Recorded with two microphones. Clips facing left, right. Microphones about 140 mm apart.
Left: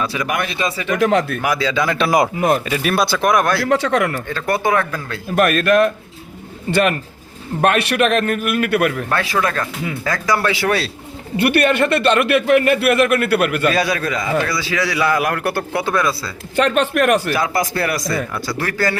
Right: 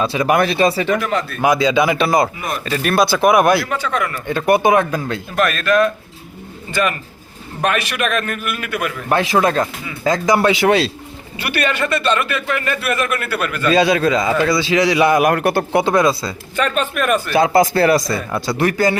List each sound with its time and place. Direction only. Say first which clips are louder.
0.0 s speech: right 6 dB; 30° right (ahead or behind)
0.9 s speech: left 4 dB; 90° left
1.4 s speech: right 4 dB; 20° right (ahead or behind)
2.0 s speech: left 1 dB; 10° left (ahead or behind); by 3.6 s 10° right (ahead or behind)
3.7 s speech: left 5 dB; 75° left (ahead or behind)
4.3 s speech: right 5 dB; 15° right (ahead or behind)
5.4 s speech: left 2 dB; 50° left (ahead or behind)
6.7 s a man's voice: left 3 dB; 65° left (ahead or behind)
9.0 s a man's voice: right 4 dB; 20° right (ahead or behind)
11.3 s a man's voice: left 6 dB; 60° left (ahead or behind)
13.7 s a man's voice: right 4 dB; 25° right (ahead or behind)
16.6 s speech: left 4 dB; 65° left (ahead or behind)
17.3 s a man's voice: right 6 dB; 25° right (ahead or behind)